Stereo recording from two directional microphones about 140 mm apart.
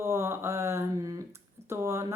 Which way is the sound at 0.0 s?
20° right (ahead or behind).